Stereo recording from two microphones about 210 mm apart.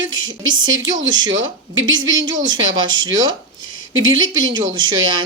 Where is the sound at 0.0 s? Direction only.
65° right (ahead or behind).